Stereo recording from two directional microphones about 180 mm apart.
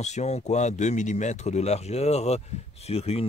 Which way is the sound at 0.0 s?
40° left (ahead or behind).